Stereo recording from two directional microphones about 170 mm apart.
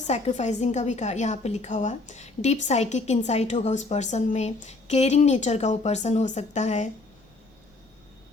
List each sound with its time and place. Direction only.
0.1 s a woman's voice: 40° left (ahead or behind)